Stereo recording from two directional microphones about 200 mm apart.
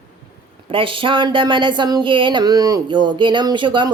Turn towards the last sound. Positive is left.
turn(degrees=-25)  # may be behind; listen again after turning